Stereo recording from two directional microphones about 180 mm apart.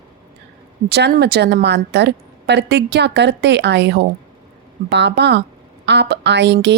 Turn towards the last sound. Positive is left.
turn(degrees=-75)  # may be behind; listen again after turning